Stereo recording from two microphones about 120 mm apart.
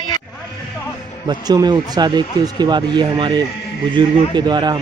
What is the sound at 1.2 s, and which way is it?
Speech, 35° right (ahead or behind).